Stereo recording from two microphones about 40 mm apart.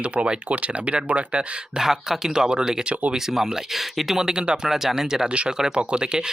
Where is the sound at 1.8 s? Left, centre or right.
Centre.